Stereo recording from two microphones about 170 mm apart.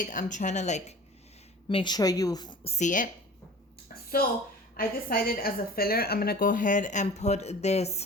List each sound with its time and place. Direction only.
0.0 s a woman's voice: 50° left (ahead or behind)
1.6 s a woman's voice: 25° left (ahead or behind)
2.6 s a woman's voice: 45° left (ahead or behind)
4.8 s a woman's voice: 60° left (ahead or behind); by 8.0 s 40° left (ahead or behind)